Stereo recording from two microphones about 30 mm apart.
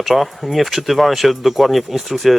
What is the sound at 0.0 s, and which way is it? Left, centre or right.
Speech, centre.